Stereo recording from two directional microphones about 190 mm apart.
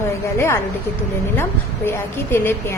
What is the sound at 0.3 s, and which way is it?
A woman's voice, 15° left (ahead or behind).